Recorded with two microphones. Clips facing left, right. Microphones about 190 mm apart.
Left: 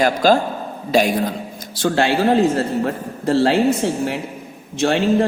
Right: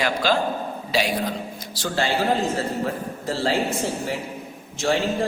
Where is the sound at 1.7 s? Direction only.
60° left (ahead or behind).